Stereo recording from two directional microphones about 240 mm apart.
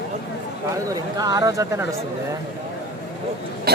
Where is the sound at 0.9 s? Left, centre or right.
Centre.